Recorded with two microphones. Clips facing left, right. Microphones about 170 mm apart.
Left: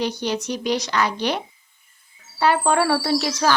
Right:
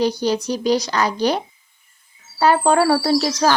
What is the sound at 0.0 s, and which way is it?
Speech, 35° right (ahead or behind).